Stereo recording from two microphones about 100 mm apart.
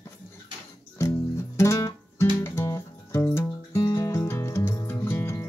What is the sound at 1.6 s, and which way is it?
Music, 30° left (ahead or behind).